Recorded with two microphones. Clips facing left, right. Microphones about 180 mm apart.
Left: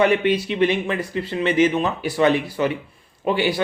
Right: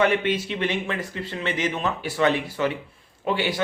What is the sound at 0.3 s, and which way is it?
Speech, 15° left (ahead or behind).